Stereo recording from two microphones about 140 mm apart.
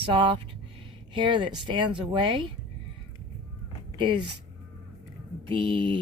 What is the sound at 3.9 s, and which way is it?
Speech, 35° right (ahead or behind).